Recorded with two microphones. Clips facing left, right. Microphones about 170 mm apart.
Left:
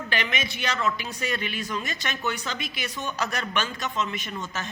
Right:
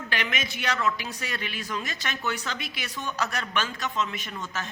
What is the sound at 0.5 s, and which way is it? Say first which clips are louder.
A man's voice: right 1 dB; 5° right (ahead or behind).